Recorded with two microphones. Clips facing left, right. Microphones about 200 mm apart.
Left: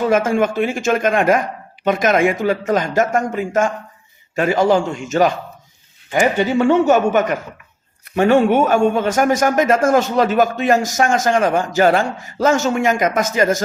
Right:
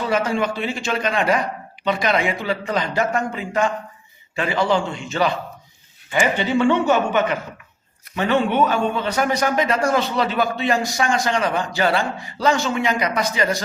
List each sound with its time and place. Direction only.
0.0 s speech: 50° left (ahead or behind)